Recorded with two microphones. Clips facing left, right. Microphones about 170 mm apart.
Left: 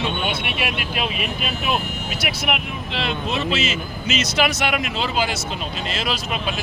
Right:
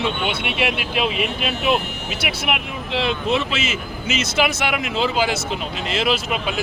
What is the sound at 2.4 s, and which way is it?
Speech, 20° right (ahead or behind).